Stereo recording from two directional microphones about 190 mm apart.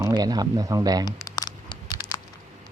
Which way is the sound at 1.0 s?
20° left (ahead or behind).